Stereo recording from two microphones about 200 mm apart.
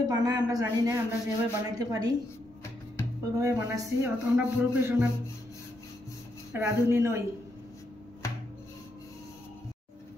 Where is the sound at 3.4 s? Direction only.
15° right (ahead or behind).